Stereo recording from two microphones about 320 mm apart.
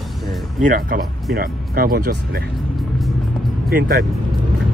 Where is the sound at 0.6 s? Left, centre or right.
Right.